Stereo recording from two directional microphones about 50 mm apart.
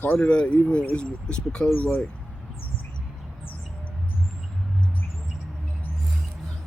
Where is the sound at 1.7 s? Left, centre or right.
Left.